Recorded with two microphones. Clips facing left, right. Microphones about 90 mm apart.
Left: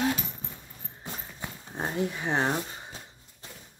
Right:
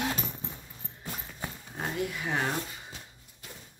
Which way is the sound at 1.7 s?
30° left (ahead or behind).